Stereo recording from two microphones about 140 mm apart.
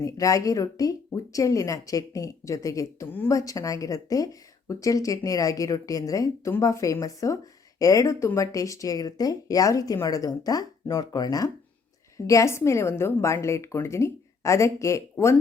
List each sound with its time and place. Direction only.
0.0 s speech: 25° left (ahead or behind)